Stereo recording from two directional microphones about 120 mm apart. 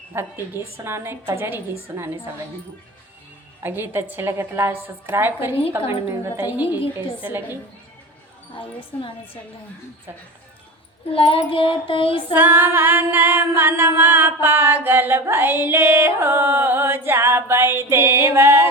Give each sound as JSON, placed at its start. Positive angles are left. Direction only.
{"t": 0.1, "sound": "female singing", "side_deg": -20}
{"t": 1.3, "sound": "a woman's voice", "side_deg": -20}
{"t": 3.6, "sound": "female singing", "side_deg": -15}
{"t": 7.2, "sound": "a woman's voice", "side_deg": -15}
{"t": 8.5, "sound": "child singing", "side_deg": 45}
{"t": 11.1, "sound": "child singing", "side_deg": 50}
{"t": 12.3, "sound": "female singing", "side_deg": -20}